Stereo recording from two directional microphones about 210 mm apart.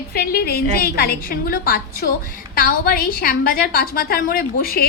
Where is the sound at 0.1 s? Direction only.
45° left (ahead or behind).